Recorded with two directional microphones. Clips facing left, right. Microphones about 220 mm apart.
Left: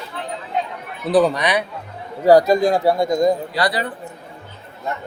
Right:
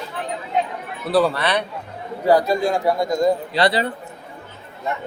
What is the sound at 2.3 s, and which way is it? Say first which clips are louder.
Speech: left 4 dB; 40° left (ahead or behind).